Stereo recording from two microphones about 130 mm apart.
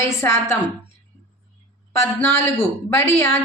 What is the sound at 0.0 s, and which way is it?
Speech, 20° left (ahead or behind).